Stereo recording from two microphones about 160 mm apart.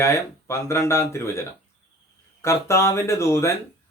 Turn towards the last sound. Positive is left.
turn(degrees=15)  # may be behind; listen again after turning